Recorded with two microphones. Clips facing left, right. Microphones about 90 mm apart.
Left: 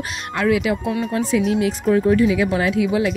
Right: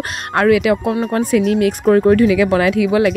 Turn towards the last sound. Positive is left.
turn(degrees=-75)  # may be behind; listen again after turning